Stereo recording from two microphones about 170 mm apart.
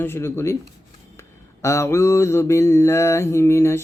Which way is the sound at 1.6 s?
15° left (ahead or behind).